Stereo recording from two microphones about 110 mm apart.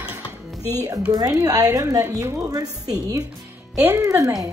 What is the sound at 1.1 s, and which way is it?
A woman's voice, 35° right (ahead or behind).